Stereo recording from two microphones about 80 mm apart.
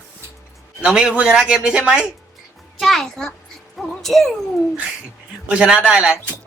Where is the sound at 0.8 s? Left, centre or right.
Centre.